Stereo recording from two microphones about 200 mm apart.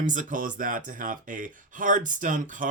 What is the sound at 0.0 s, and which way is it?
Speech, 40° right (ahead or behind).